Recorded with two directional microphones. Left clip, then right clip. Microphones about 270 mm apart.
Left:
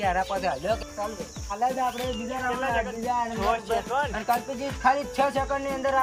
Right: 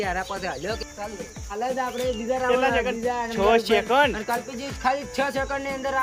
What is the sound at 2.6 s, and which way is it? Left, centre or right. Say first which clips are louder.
Speech: right 4 dB; right.